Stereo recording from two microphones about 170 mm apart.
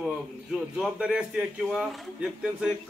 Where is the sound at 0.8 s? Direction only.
5° right (ahead or behind).